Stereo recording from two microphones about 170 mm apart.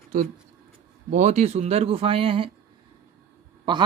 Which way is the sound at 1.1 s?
45° right (ahead or behind).